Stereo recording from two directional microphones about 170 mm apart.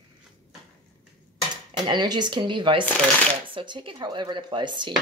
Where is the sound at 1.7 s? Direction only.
25° right (ahead or behind).